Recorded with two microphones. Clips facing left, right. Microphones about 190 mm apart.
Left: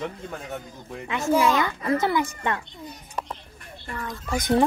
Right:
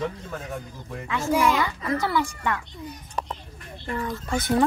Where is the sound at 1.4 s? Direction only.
15° left (ahead or behind).